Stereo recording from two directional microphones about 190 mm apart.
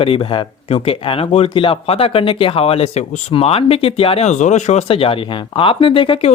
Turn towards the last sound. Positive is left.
turn(degrees=30)  # may be behind; listen again after turning